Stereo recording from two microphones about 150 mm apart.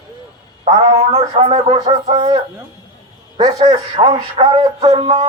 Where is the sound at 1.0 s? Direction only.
40° right (ahead or behind).